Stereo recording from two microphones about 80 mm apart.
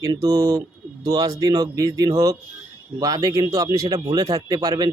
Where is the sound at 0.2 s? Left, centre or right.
Right.